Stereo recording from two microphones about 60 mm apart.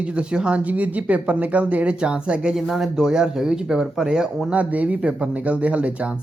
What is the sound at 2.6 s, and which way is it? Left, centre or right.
Speech, centre.